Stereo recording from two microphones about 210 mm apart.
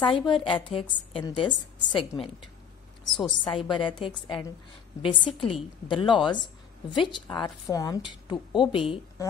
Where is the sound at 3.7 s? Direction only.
25° left (ahead or behind).